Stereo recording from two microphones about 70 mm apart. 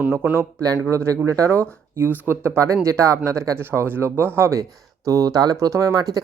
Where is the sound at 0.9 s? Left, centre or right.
Right.